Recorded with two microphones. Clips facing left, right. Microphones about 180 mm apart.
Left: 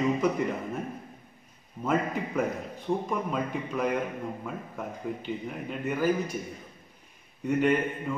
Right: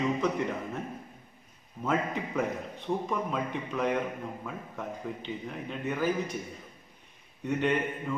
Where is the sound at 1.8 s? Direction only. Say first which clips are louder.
Left 2 dB; 5° left (ahead or behind).